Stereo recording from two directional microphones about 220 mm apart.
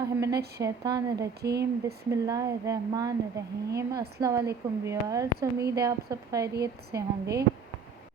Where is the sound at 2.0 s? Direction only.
15° right (ahead or behind).